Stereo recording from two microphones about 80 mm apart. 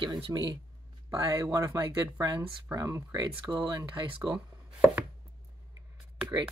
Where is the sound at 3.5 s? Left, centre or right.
Right.